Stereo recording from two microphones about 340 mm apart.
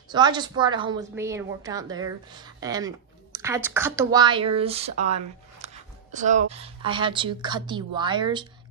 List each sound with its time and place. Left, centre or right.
0.1 s a woman's voice: centre